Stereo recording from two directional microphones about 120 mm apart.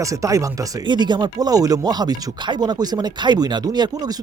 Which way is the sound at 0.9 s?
40° right (ahead or behind).